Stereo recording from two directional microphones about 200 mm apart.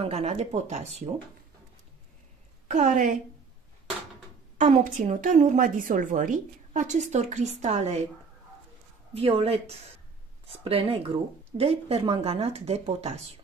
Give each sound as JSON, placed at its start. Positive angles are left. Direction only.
{"t": 0.0, "sound": "a woman's voice", "side_deg": -30}
{"t": 2.7, "sound": "a woman's voice", "side_deg": -40}
{"t": 4.6, "sound": "a woman's voice", "side_deg": -40}
{"t": 9.1, "sound": "a woman's voice", "side_deg": -30}